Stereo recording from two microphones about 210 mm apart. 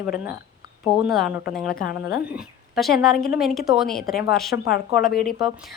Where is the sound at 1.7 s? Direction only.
45° left (ahead or behind).